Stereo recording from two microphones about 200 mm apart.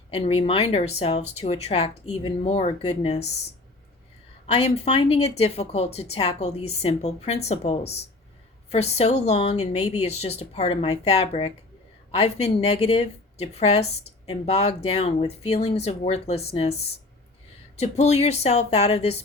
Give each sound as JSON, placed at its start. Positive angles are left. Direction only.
{"t": 0.1, "sound": "a woman's voice", "side_deg": 30}
{"t": 4.5, "sound": "a woman's voice", "side_deg": 30}
{"t": 17.7, "sound": "a woman's voice", "side_deg": 35}